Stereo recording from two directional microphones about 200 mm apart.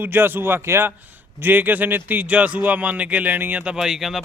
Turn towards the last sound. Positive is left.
turn(degrees=0)  # may be behind; listen again after turning